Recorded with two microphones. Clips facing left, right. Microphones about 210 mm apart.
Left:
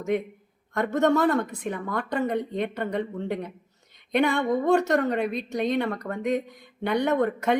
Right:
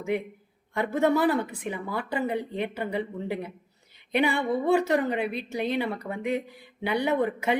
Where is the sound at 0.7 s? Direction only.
10° right (ahead or behind).